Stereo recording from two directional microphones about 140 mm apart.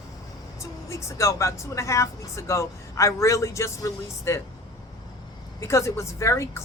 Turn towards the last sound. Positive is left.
turn(degrees=20)  # may be behind; listen again after turning